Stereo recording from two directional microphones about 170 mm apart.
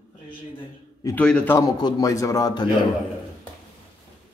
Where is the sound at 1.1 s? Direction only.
10° left (ahead or behind).